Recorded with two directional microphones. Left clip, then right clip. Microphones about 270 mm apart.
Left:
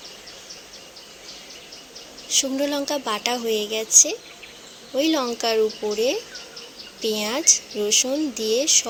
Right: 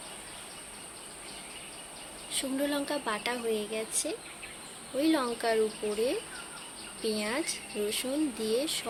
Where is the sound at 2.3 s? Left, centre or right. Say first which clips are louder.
Left 9 dB; left.